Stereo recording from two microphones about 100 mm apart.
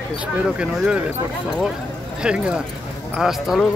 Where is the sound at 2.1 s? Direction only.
10° right (ahead or behind).